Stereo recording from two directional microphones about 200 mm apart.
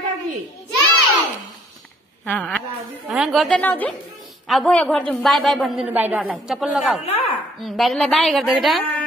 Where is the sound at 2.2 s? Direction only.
5° left (ahead or behind).